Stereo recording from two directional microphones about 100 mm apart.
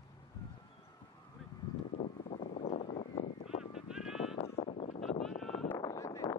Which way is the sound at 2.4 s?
90° left.